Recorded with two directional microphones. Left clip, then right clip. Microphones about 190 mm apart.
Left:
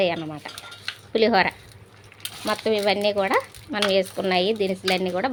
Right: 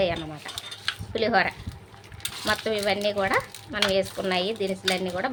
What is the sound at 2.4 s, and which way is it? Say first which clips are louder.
Speech: left 3 dB; 20° left (ahead or behind).